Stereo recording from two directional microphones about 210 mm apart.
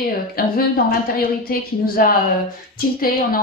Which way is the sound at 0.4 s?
45° left (ahead or behind).